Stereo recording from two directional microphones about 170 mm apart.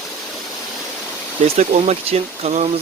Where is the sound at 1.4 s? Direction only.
40° right (ahead or behind).